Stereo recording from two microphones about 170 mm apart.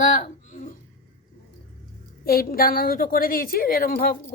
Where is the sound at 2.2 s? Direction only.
60° left (ahead or behind).